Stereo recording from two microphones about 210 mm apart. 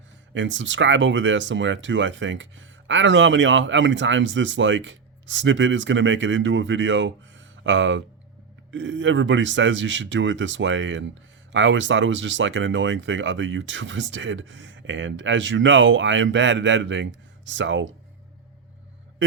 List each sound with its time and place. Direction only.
0.3 s speech: 60° right (ahead or behind)